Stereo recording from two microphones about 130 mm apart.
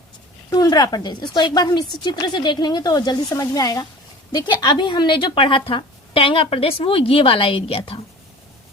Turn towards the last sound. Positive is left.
turn(degrees=45)  # may be behind; listen again after turning